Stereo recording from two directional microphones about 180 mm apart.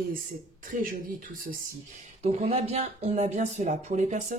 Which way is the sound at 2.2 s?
35° right (ahead or behind).